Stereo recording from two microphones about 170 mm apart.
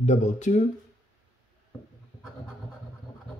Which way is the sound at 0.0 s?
45° left (ahead or behind).